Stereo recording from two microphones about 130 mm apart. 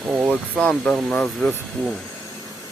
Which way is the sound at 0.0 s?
Centre (ahead or behind).